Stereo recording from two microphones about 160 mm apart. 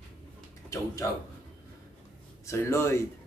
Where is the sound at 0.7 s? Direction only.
20° left (ahead or behind).